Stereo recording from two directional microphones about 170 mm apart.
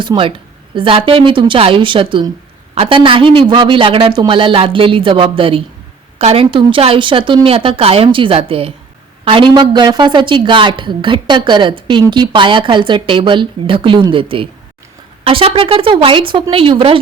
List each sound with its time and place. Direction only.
0.0 s a woman's voice: 30° right (ahead or behind)